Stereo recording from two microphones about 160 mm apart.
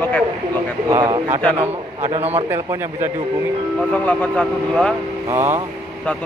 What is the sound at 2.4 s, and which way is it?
Speech, 15° right (ahead or behind).